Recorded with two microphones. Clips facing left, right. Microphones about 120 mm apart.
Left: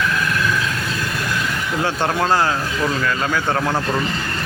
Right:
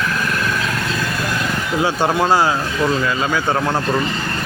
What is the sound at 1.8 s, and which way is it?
Speech, 5° right (ahead or behind).